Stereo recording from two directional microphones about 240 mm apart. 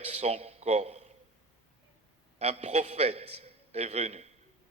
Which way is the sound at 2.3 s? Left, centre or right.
Right.